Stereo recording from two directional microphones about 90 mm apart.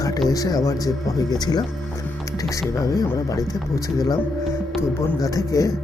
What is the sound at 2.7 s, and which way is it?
Speech, 40° left (ahead or behind).